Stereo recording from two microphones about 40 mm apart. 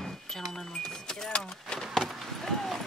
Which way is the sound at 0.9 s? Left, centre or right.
Centre.